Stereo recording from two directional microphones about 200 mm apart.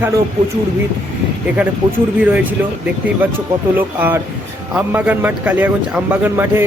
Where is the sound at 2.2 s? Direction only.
10° right (ahead or behind).